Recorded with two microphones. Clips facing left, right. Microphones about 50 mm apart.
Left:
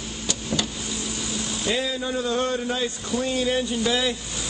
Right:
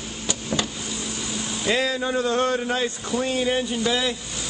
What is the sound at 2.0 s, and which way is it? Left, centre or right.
Speech, right.